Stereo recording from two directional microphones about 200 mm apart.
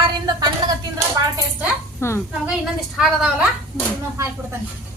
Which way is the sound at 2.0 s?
10° left (ahead or behind).